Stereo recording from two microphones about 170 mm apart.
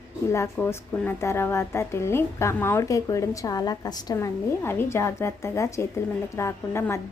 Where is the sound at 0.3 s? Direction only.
15° left (ahead or behind).